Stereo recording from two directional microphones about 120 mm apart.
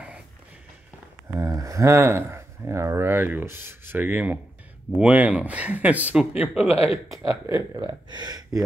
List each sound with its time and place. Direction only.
1.3 s speech: 25° right (ahead or behind); by 6.7 s 10° right (ahead or behind)
6.7 s speech: 55° left (ahead or behind)
7.2 s speech: 25° right (ahead or behind)